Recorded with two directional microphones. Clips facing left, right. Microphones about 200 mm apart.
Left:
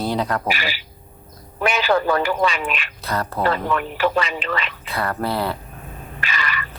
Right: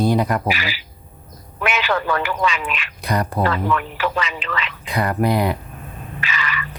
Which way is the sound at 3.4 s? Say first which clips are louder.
Right 1 dB; 35° left (ahead or behind).